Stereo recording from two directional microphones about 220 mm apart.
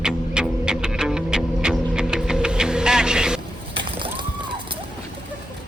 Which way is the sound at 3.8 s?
20° right (ahead or behind).